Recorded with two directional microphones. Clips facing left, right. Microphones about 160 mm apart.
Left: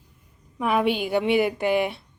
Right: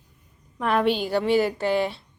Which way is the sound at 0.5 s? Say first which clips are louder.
Even; 5° left (ahead or behind).